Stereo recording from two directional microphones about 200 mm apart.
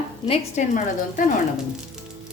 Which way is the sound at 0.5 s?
40° left (ahead or behind).